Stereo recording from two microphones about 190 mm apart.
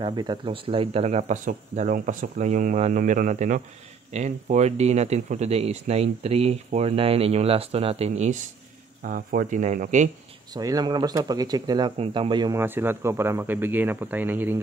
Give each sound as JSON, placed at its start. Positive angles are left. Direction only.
{"t": 0.0, "sound": "speech", "side_deg": -20}
{"t": 9.0, "sound": "speech", "side_deg": -50}
{"t": 10.5, "sound": "speech", "side_deg": -20}